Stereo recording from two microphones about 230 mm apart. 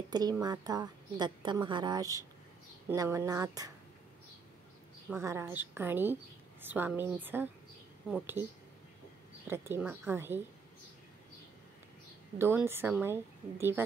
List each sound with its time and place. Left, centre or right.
0.1 s a woman's voice: centre
5.1 s a woman's voice: centre
9.5 s a woman's voice: centre
12.4 s a woman's voice: centre